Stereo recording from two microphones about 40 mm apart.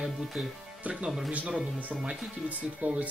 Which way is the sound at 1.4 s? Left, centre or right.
Right.